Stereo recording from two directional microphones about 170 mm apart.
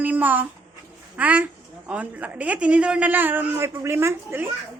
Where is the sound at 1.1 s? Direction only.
10° right (ahead or behind).